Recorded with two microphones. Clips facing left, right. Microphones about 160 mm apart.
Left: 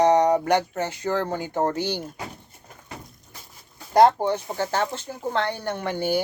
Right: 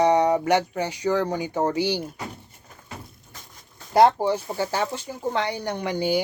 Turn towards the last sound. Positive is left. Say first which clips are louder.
# right 1 dB
turn(degrees=-15)  # may be behind; listen again after turning